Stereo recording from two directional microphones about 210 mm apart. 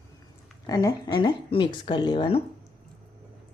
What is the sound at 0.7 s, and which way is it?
Speech, 15° left (ahead or behind).